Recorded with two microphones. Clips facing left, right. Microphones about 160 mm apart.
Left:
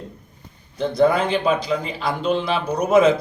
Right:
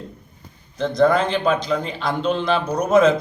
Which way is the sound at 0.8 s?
5° left (ahead or behind).